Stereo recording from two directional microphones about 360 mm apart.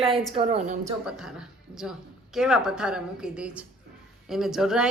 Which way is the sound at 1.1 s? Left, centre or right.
Centre.